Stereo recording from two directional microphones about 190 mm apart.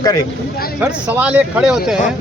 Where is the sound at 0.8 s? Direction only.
10° right (ahead or behind).